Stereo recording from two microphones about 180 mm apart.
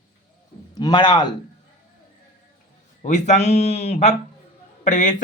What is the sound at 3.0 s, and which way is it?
Speech, 40° left (ahead or behind).